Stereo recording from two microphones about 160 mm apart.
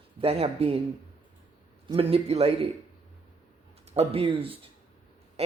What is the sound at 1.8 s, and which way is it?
Speech, 35° right (ahead or behind).